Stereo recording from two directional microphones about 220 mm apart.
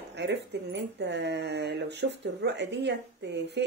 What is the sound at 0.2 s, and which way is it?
Speech, 50° right (ahead or behind).